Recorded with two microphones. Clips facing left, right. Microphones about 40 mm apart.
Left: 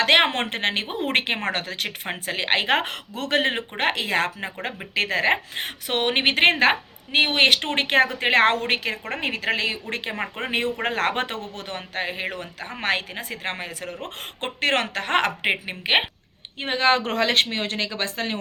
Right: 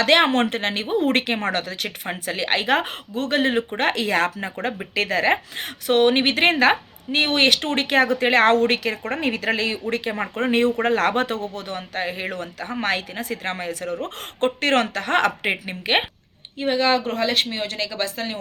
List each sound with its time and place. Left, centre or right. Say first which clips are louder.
0.0 s a woman's voice: right 2 dB; left
2.8 s speech: right 3 dB; left
3.8 s a woman's voice: even; left
4.9 s a woman's voice: right 1 dB; left
10.8 s a woman's voice: right 4 dB; left
11.5 s a woman's voice: right 2 dB; left
12.2 s a woman's voice: right 2 dB; centre
12.6 s a woman's voice: right 1 dB; left
14.9 s a woman's voice: right 2 dB; left
16.6 s a woman's voice: right 1 dB; left
17.0 s speech: even; left
17.3 s a woman's voice: left 1 dB; left